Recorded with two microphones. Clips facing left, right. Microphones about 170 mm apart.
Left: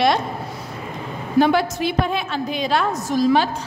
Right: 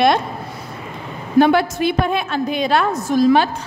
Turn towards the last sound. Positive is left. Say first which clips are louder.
# right 3 dB
turn(degrees=-60)  # may be behind; listen again after turning